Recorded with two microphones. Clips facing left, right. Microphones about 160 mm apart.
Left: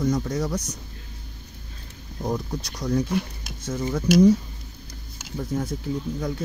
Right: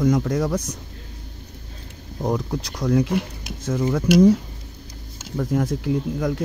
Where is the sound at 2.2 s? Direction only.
55° right (ahead or behind).